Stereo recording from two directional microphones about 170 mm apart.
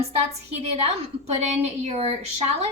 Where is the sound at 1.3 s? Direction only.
40° right (ahead or behind).